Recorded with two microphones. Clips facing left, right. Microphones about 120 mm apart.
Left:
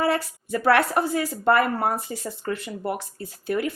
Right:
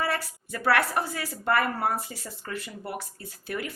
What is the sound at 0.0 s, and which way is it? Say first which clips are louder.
A woman's voice: left 6 dB; 25° left (ahead or behind).